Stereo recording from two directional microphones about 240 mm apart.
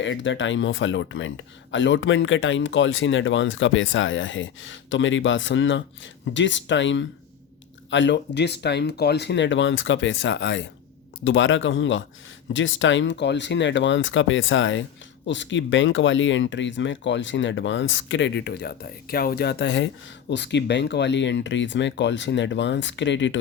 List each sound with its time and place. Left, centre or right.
0.0 s speech: left